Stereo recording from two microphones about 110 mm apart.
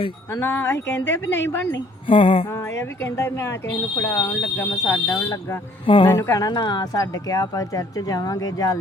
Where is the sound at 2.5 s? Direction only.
25° left (ahead or behind).